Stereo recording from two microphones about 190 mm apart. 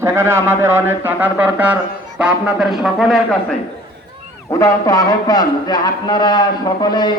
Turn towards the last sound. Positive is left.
turn(degrees=25)  # may be behind; listen again after turning